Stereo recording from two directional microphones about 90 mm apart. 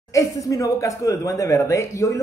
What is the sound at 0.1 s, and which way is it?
Speech, 40° left (ahead or behind).